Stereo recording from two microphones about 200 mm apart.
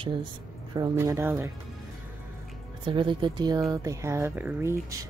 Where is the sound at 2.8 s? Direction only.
25° right (ahead or behind).